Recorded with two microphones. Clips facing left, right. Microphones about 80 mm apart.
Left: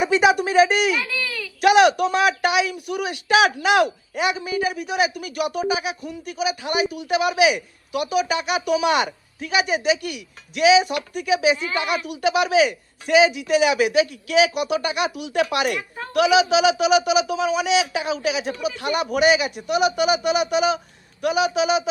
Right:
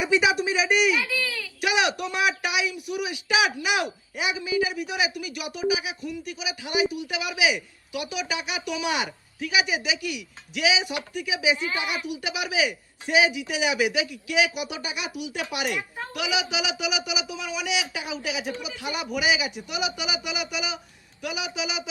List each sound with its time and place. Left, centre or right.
0.0 s speech: left
1.0 s speech: centre
1.6 s speech: left
3.6 s a woman's voice: left
12.0 s a man's voice: left